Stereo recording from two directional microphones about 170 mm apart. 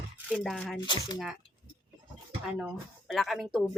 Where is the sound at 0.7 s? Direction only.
25° left (ahead or behind).